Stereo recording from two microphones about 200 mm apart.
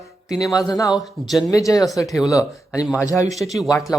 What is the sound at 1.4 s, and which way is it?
Speech, 15° left (ahead or behind).